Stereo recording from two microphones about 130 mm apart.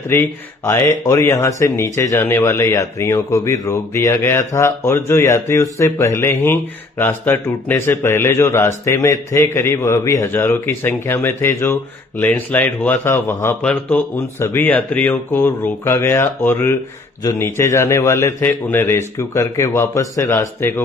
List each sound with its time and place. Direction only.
0.2 s speech: 20° left (ahead or behind)
13.6 s speech: 10° left (ahead or behind)